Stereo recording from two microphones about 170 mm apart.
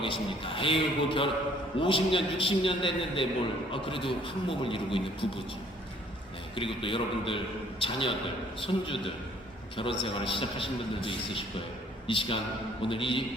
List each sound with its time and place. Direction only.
0.0 s a man's voice: 30° left (ahead or behind)
6.6 s a man's voice: 30° left (ahead or behind)